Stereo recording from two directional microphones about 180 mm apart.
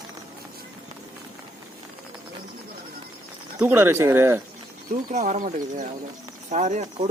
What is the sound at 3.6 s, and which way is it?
Speech, 10° right (ahead or behind).